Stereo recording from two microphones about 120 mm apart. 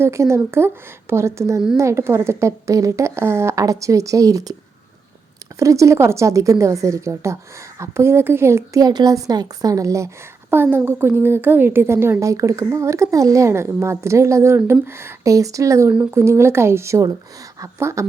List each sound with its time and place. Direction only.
0.0 s a woman's voice: 25° right (ahead or behind)
5.5 s a woman's voice: 25° right (ahead or behind)